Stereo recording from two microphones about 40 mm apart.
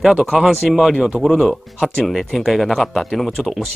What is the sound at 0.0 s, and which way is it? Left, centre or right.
Speech, centre.